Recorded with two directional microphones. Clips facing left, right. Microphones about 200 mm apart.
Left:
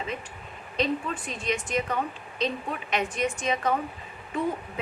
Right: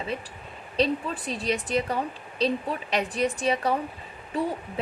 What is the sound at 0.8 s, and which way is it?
A woman's voice, 35° right (ahead or behind).